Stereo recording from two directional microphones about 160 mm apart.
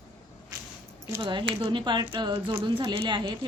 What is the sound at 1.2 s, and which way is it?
Speech, 30° right (ahead or behind).